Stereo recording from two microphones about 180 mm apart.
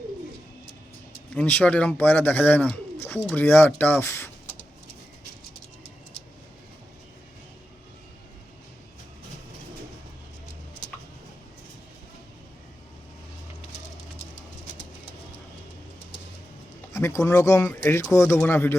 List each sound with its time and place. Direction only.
1.3 s speech: 10° left (ahead or behind)
16.9 s speech: 15° left (ahead or behind)